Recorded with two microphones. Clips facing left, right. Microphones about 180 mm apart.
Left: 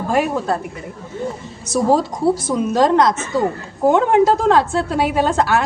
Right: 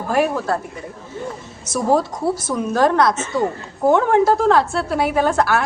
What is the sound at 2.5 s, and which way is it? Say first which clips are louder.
A woman's voice: right 1 dB; 20° left (ahead or behind).